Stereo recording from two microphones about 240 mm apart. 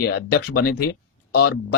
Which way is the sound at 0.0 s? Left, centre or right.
Left.